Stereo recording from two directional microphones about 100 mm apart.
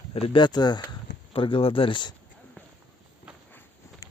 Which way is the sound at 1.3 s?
65° left (ahead or behind).